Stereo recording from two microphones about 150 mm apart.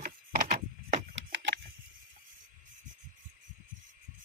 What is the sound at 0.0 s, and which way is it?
Wood, 65° right (ahead or behind).